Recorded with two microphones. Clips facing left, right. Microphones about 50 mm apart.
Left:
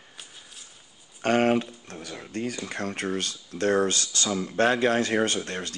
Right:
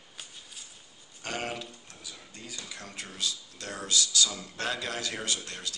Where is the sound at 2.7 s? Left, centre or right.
Left.